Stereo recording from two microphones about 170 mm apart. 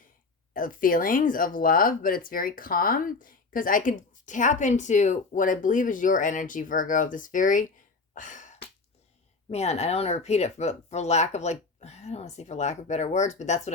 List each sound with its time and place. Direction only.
0.5 s speech: 55° left (ahead or behind)
8.1 s a sound: 50° left (ahead or behind)
9.5 s speech: 40° left (ahead or behind)